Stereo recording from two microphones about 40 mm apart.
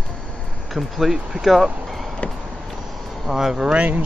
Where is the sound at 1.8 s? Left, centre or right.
Centre.